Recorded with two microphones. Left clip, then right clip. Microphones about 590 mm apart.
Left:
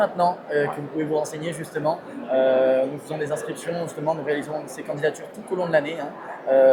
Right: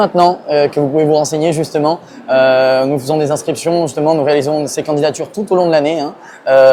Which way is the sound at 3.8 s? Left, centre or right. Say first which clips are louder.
Right 11 dB; right.